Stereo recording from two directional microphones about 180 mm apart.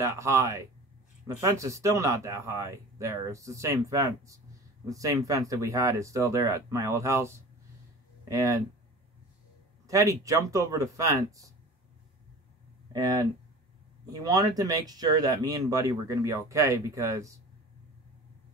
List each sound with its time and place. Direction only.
0.0 s speech: 15° right (ahead or behind)
9.8 s speech: 20° right (ahead or behind)
12.9 s speech: 20° right (ahead or behind)